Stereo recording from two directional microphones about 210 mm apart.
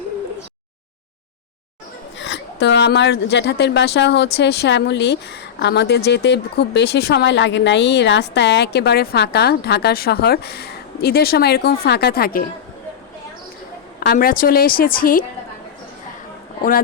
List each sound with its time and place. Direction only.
2.1 s a woman's voice: 55° left (ahead or behind)
14.0 s a woman's voice: 45° left (ahead or behind)